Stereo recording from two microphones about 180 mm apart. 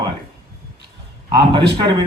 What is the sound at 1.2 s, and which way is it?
Speech, 25° right (ahead or behind).